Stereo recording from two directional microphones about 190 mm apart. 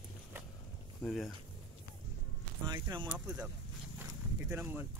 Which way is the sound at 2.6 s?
20° right (ahead or behind).